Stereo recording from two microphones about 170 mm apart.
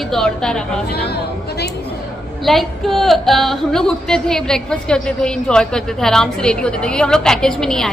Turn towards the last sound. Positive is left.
turn(degrees=5)  # may be behind; listen again after turning